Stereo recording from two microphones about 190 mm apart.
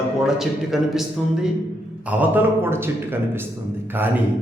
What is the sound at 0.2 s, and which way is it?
A man's voice, centre (ahead or behind).